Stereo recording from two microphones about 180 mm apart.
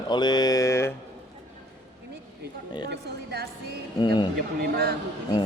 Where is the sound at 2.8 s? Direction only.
65° right (ahead or behind).